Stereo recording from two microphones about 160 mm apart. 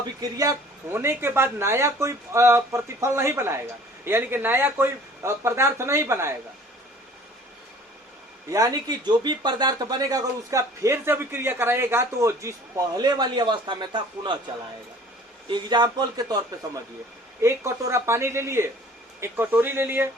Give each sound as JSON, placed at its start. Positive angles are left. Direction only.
{"t": 0.0, "sound": "speech", "side_deg": -25}
{"t": 8.4, "sound": "speech", "side_deg": -20}
{"t": 15.4, "sound": "speech", "side_deg": -30}